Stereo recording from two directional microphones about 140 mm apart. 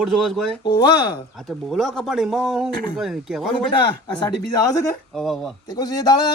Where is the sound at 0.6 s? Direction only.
35° left (ahead or behind).